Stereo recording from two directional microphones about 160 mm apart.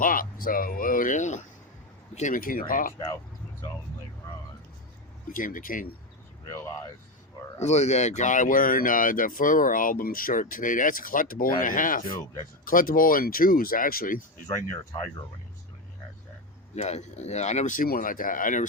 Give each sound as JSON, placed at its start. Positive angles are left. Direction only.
{"t": 0.0, "sound": "speech", "side_deg": 60}
{"t": 5.3, "sound": "speech", "side_deg": 55}
{"t": 6.5, "sound": "speech", "side_deg": 20}
{"t": 7.6, "sound": "speech", "side_deg": 45}
{"t": 16.7, "sound": "speech", "side_deg": 45}